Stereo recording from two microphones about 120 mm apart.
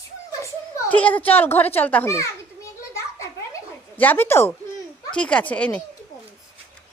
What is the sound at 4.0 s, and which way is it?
Speech, 15° left (ahead or behind).